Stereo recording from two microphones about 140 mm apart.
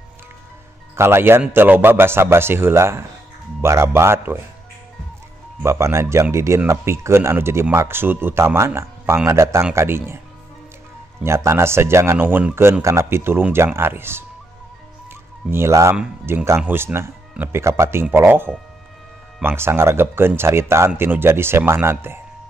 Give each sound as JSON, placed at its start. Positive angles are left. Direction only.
{"t": 0.9, "sound": "speech", "side_deg": -20}
{"t": 5.6, "sound": "speech", "side_deg": -20}
{"t": 11.2, "sound": "speech", "side_deg": -20}
{"t": 15.5, "sound": "speech", "side_deg": -20}